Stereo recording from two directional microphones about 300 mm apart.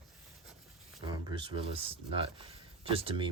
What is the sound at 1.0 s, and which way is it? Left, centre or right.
Speech, centre.